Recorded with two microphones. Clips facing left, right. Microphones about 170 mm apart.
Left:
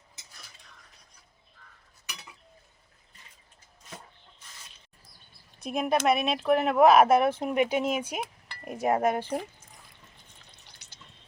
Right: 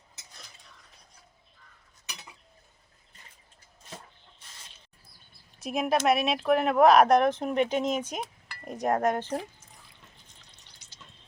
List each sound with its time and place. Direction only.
3.8 s a sound: 30° right (ahead or behind)
5.5 s speech: centre (ahead or behind)
10.8 s water: 65° left (ahead or behind)